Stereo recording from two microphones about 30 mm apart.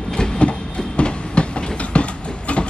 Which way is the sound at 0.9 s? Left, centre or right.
Left.